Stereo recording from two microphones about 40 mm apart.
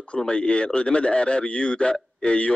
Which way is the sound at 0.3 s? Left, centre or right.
Left.